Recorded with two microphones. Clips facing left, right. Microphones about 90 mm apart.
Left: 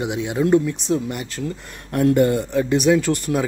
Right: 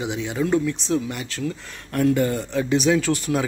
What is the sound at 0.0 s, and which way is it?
A man's voice, 10° left (ahead or behind).